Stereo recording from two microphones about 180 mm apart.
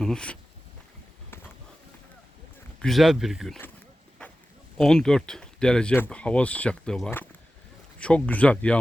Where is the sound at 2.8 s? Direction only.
Centre (ahead or behind).